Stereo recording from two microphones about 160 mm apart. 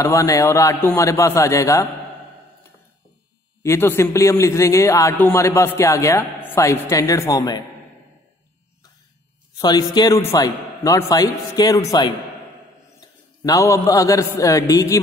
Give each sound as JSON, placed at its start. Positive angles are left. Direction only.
{"t": 0.0, "sound": "a man's voice", "side_deg": 20}
{"t": 3.6, "sound": "a man's voice", "side_deg": 15}
{"t": 9.6, "sound": "a man's voice", "side_deg": 25}
{"t": 13.4, "sound": "a man's voice", "side_deg": 20}